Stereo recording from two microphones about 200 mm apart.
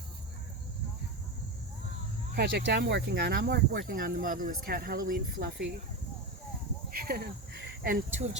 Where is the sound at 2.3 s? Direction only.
60° right (ahead or behind).